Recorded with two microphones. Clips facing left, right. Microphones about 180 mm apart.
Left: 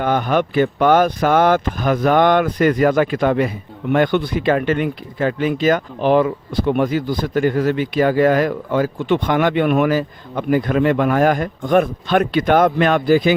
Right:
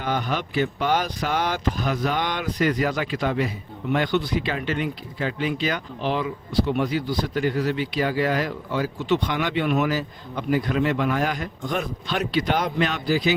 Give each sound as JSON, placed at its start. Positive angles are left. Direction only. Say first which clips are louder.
{"t": 0.0, "sound": "speech", "louder": "left 9 dB", "side_deg": 55}